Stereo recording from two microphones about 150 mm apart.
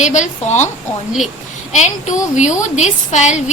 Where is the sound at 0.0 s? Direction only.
55° left (ahead or behind).